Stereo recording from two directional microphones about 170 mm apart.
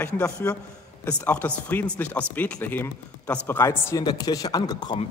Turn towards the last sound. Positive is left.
turn(degrees=25)  # may be behind; listen again after turning